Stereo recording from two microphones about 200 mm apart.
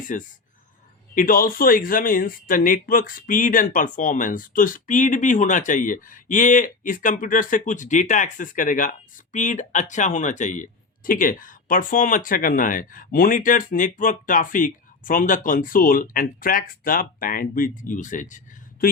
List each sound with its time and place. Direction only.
0.1 s speech: 40° left (ahead or behind)